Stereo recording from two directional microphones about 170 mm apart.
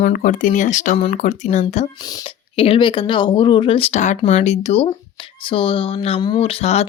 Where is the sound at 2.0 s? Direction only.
25° left (ahead or behind).